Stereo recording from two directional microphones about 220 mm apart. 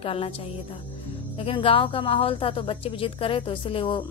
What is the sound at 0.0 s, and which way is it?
Speech, 25° left (ahead or behind).